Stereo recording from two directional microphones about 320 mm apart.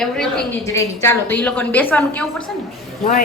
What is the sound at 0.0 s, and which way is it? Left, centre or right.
A woman's voice, centre.